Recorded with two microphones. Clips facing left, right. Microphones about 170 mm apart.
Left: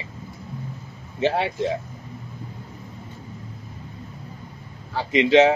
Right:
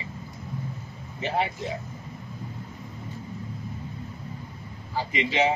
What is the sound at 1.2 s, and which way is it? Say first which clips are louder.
Speech: left 5 dB; 90° left.